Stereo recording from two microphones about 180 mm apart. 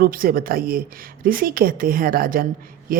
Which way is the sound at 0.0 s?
55° right (ahead or behind).